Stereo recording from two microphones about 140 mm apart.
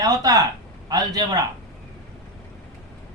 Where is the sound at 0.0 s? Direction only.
25° right (ahead or behind).